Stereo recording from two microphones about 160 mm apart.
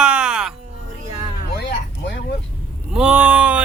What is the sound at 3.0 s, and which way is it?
Speech, 10° right (ahead or behind).